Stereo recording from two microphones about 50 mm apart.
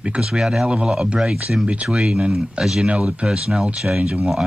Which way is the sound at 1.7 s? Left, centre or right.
Right.